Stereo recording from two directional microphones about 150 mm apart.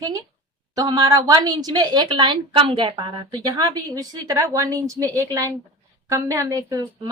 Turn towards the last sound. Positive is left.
turn(degrees=-25)  # may be behind; listen again after turning